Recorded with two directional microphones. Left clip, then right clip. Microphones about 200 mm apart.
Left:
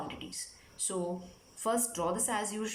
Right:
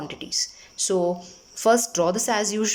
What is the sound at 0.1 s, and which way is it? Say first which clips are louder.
Speech: right 15 dB; 45° right (ahead or behind).